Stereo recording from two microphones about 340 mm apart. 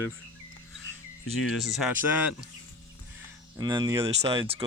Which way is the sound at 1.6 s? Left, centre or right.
Centre.